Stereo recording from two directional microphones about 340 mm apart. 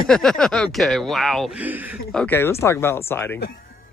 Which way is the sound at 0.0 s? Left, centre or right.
Centre.